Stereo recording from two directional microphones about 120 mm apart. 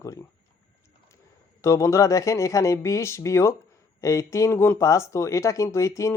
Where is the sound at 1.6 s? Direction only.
25° left (ahead or behind).